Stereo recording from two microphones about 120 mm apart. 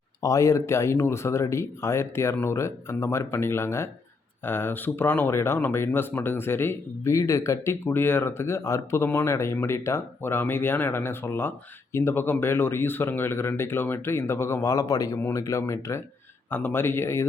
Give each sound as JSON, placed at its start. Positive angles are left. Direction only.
{"t": 0.2, "sound": "speech", "side_deg": 25}